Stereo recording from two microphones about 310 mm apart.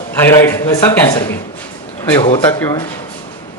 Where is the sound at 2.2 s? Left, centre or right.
Centre.